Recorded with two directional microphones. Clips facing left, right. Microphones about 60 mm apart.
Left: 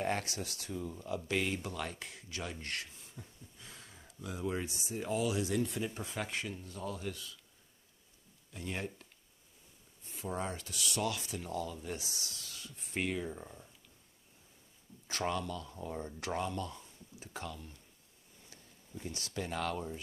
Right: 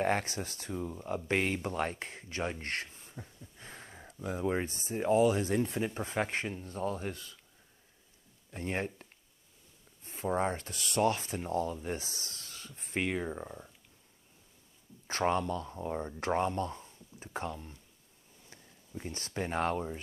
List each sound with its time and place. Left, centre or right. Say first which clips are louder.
0.0 s speech: right 5 dB; right
8.5 s speech: right 5 dB; right
10.0 s speech: right 7 dB; right
15.0 s speech: right 6 dB; right